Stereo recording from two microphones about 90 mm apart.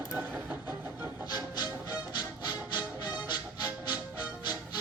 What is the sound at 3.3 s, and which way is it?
Music, 50° left (ahead or behind).